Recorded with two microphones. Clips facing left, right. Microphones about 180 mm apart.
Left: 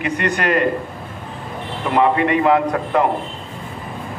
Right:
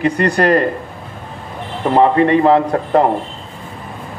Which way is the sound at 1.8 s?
35° right (ahead or behind).